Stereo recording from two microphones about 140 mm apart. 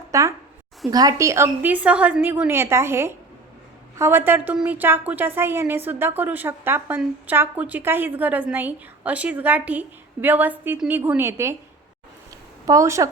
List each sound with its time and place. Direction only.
0.1 s a woman's voice: 20° right (ahead or behind)
12.6 s speech: 20° right (ahead or behind)